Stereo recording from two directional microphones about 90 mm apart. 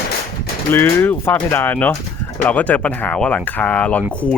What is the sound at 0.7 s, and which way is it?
Speech, 25° left (ahead or behind).